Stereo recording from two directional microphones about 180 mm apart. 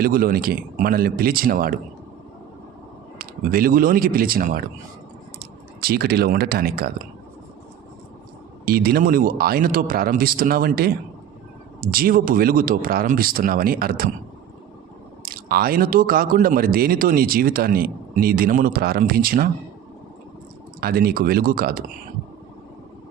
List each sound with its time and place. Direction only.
0.0 s speech: 55° right (ahead or behind)
3.2 s speech: 55° right (ahead or behind)
8.6 s speech: 55° right (ahead or behind)
15.2 s speech: 55° right (ahead or behind)
20.8 s speech: 55° right (ahead or behind)